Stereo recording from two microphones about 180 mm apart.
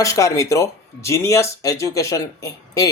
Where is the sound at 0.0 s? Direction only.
15° left (ahead or behind).